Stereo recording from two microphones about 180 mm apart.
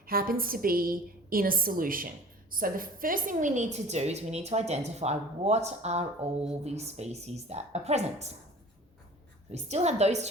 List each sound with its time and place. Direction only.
0.0 s a woman's voice: 55° right (ahead or behind); by 8.4 s 35° right (ahead or behind)
9.5 s a woman's voice: 40° right (ahead or behind)